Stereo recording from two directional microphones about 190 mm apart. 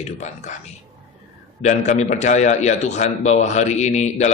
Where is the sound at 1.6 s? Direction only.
40° left (ahead or behind).